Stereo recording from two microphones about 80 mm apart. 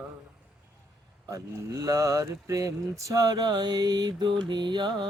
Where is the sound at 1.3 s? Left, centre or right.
Right.